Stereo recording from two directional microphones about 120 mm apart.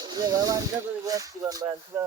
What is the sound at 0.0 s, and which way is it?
Speech, 35° right (ahead or behind).